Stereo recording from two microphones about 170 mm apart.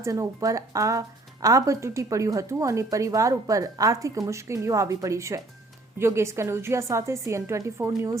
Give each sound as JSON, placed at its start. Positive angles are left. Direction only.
{"t": 0.0, "sound": "a woman's voice", "side_deg": -20}